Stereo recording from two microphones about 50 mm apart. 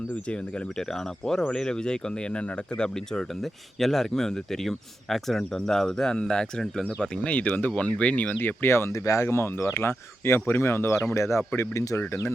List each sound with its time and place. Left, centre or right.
0.8 s speech: centre
6.8 s speech: left
8.4 s speech: left